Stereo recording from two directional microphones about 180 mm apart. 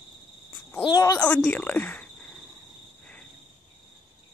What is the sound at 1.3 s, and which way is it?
Speech, 10° left (ahead or behind).